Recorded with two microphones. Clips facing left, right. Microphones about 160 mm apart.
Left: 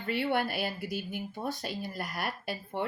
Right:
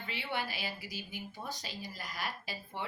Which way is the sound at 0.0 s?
55° left (ahead or behind).